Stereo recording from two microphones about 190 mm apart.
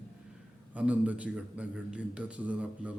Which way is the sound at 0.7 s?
5° right (ahead or behind).